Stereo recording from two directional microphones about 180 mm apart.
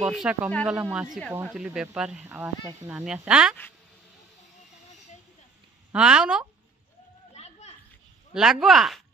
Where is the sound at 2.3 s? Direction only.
15° right (ahead or behind).